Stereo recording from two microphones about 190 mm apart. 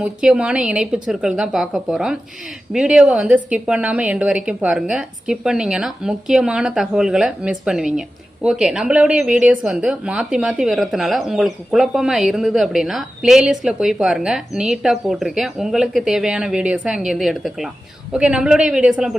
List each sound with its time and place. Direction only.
0.0 s a woman's voice: 5° right (ahead or behind)